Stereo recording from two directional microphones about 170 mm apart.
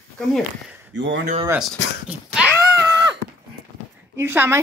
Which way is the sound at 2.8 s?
15° right (ahead or behind).